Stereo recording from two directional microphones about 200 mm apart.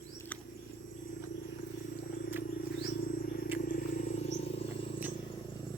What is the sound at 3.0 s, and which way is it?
Wild animals, 45° left (ahead or behind).